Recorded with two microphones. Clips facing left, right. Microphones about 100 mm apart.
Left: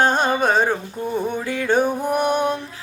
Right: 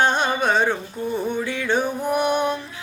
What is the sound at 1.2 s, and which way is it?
Music, 45° left (ahead or behind).